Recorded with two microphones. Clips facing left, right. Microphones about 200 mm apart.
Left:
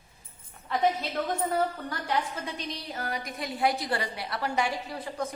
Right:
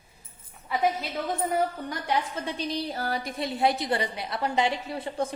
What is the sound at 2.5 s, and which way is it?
A woman's voice, 35° right (ahead or behind).